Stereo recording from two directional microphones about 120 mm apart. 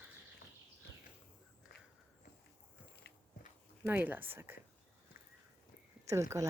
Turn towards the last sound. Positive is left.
turn(degrees=-25)  # may be behind; listen again after turning